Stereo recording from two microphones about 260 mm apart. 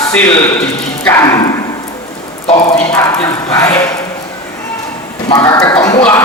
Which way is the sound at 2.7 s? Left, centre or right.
Centre.